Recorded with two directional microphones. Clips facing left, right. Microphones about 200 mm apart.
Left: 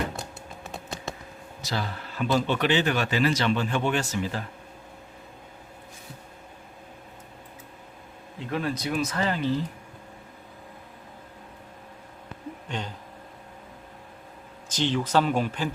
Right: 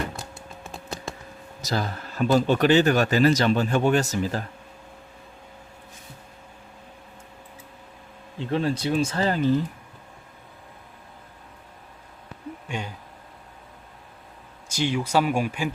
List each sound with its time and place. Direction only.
1.6 s speech: 45° right (ahead or behind)
8.4 s speech: 30° right (ahead or behind)
12.6 s a sound: 10° right (ahead or behind)
14.7 s speech: 10° right (ahead or behind)